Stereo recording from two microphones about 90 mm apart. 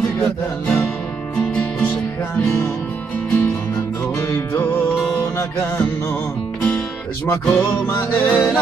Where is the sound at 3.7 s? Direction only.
35° left (ahead or behind).